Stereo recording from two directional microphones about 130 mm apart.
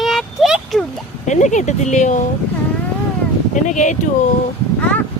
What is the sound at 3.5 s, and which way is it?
Speech, 70° left (ahead or behind).